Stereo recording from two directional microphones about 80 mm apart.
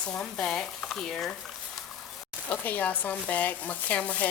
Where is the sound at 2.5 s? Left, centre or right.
Left.